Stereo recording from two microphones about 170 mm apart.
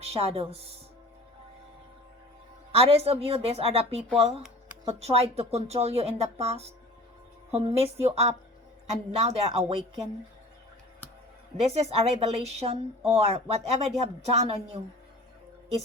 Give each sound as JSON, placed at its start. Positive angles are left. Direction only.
{"t": 0.0, "sound": "speech", "side_deg": -35}
{"t": 2.7, "sound": "speech", "side_deg": -35}
{"t": 11.6, "sound": "speech", "side_deg": -35}